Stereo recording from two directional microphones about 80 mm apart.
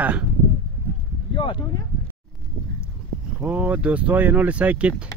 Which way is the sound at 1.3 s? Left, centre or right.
Left.